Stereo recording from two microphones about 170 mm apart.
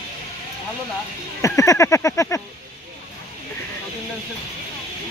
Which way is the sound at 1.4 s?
20° left (ahead or behind).